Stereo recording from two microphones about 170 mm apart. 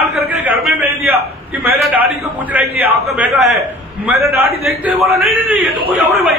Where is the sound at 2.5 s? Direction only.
10° right (ahead or behind).